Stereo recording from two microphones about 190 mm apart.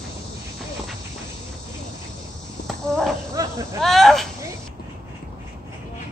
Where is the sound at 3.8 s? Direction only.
Centre (ahead or behind).